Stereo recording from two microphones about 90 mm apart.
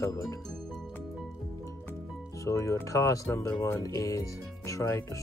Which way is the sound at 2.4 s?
40° left (ahead or behind).